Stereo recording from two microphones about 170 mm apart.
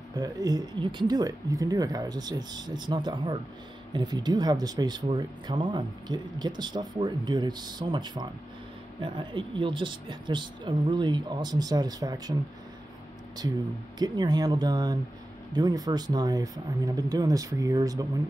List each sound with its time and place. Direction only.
0.1 s speech: 20° right (ahead or behind)
13.9 s speech: 25° right (ahead or behind)